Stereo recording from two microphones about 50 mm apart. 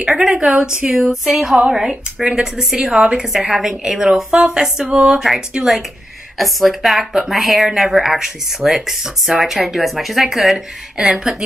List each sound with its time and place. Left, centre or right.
0.0 s a woman's voice: centre
6.3 s speech: centre